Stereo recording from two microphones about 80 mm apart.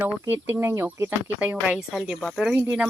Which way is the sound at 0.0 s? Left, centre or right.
Right.